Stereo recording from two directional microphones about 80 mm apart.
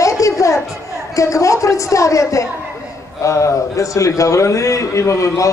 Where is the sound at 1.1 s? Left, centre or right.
Left.